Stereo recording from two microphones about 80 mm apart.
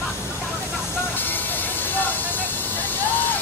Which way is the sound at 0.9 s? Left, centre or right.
Left.